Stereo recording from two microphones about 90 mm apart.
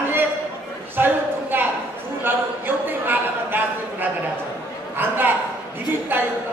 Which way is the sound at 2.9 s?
20° right (ahead or behind).